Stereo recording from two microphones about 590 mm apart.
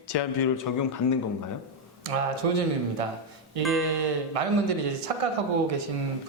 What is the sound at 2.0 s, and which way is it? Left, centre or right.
Speech, right.